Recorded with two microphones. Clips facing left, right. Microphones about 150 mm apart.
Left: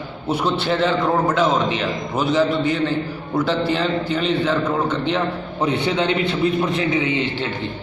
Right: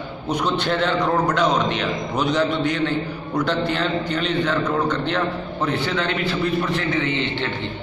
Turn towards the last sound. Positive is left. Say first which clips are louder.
# left 2 dB
turn(degrees=10)  # may be behind; listen again after turning